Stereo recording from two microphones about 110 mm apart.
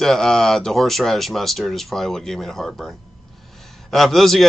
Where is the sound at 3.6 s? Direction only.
Centre (ahead or behind).